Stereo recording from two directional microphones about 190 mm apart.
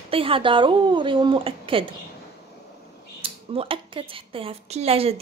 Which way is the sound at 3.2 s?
30° right (ahead or behind).